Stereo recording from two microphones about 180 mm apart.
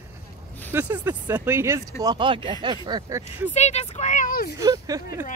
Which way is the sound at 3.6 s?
35° left (ahead or behind).